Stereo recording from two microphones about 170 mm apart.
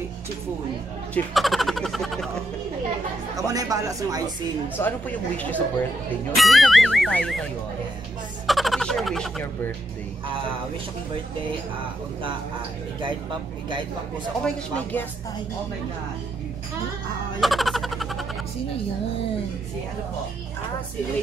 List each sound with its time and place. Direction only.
1.1 s speech: centre (ahead or behind)
3.3 s speech: 20° right (ahead or behind)
4.7 s speech: 10° left (ahead or behind)
8.5 s speech: centre (ahead or behind)
14.4 s speech: 10° left (ahead or behind)
17.4 s a sound: centre (ahead or behind)